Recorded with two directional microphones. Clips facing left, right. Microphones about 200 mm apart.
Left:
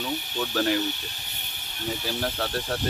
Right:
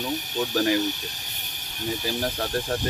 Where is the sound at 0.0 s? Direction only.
15° right (ahead or behind).